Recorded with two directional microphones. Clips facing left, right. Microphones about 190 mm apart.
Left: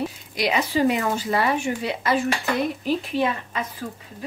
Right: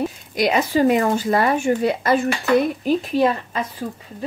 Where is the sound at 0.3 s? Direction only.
50° right (ahead or behind).